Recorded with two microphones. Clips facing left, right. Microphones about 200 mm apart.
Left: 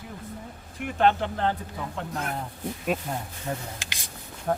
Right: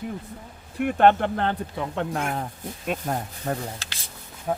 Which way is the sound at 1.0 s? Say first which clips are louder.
Right 3 dB; 55° right (ahead or behind).